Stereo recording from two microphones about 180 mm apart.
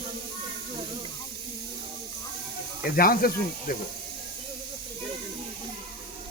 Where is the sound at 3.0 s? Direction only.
55° left (ahead or behind).